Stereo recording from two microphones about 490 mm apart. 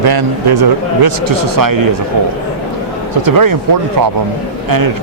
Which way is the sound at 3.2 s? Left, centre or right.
Right.